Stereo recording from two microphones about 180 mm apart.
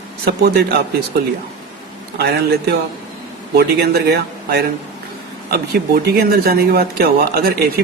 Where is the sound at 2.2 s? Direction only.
60° right (ahead or behind).